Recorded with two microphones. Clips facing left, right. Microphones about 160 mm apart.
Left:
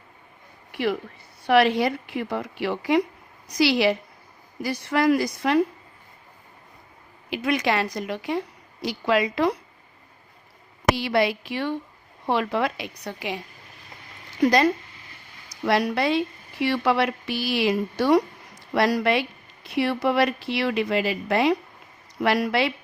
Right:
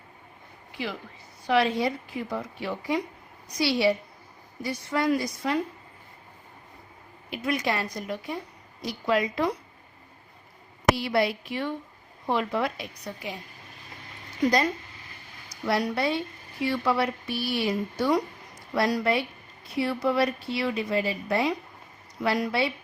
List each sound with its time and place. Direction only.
0.7 s a woman's voice: 65° left (ahead or behind); by 3.0 s 80° left
3.6 s a woman's voice: 90° left
4.6 s a woman's voice: 75° left (ahead or behind)
7.3 s a woman's voice: 90° left
10.9 s a woman's voice: 90° left
15.6 s speech: 85° left
22.2 s speech: 75° left (ahead or behind)